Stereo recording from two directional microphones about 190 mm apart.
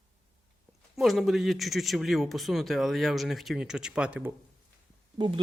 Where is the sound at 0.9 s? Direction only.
Centre (ahead or behind).